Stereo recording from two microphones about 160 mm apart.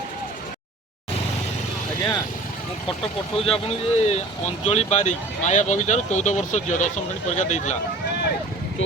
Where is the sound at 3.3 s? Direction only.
35° left (ahead or behind).